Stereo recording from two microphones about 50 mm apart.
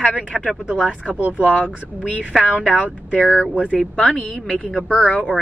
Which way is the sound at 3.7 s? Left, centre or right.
Centre.